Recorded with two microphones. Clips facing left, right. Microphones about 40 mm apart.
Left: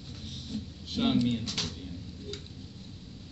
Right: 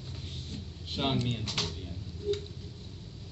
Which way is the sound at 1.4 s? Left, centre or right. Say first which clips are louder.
Right 1 dB; right.